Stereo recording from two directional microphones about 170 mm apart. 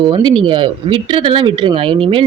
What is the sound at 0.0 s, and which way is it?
Speech, 25° right (ahead or behind).